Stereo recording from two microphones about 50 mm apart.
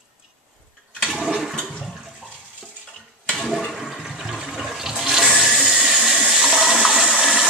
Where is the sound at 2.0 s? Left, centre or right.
Centre.